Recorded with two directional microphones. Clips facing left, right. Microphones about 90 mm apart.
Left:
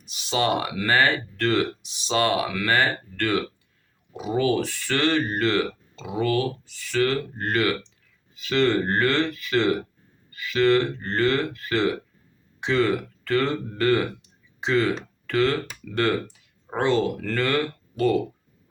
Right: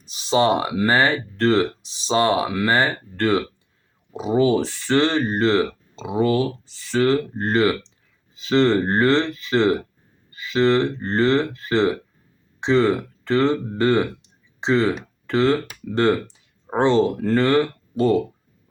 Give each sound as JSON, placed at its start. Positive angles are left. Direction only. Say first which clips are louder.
{"t": 0.0, "sound": "speech", "louder": "right 6 dB", "side_deg": -30}